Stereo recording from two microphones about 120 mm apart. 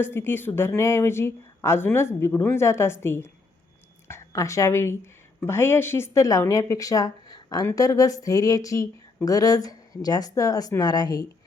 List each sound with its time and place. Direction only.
0.0 s speech: 20° left (ahead or behind)